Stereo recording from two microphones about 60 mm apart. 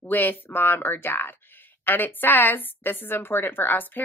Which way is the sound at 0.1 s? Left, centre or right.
Left.